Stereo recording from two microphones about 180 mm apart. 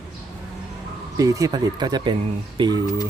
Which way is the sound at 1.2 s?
20° right (ahead or behind).